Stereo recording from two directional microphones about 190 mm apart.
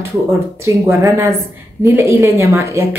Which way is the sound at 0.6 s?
15° right (ahead or behind).